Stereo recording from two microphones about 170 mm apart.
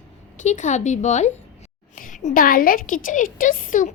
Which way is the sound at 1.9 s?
50° left (ahead or behind).